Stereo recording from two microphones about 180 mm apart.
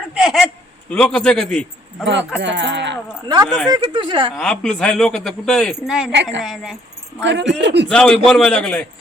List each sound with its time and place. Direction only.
0.1 s speech: centre (ahead or behind)
2.0 s speech: 75° right (ahead or behind)
3.7 s speech: 25° right (ahead or behind)
4.4 s speech: 5° left (ahead or behind)
7.2 s speech: 85° right
7.9 s speech: 5° left (ahead or behind)